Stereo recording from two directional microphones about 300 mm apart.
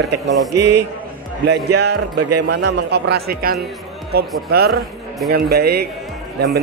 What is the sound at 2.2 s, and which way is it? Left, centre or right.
Speech, right.